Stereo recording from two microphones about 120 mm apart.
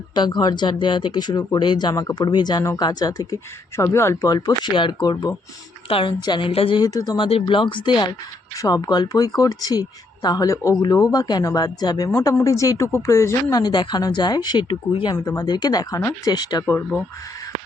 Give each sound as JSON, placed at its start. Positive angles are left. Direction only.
{"t": 0.1, "sound": "speech", "side_deg": 35}
{"t": 6.8, "sound": "speech", "side_deg": 30}
{"t": 7.2, "sound": "speech", "side_deg": 50}
{"t": 12.1, "sound": "speech", "side_deg": 20}
{"t": 15.1, "sound": "speech", "side_deg": 30}
{"t": 16.6, "sound": "speech", "side_deg": 15}